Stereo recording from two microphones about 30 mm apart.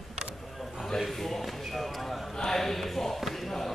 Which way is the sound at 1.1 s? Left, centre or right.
Centre.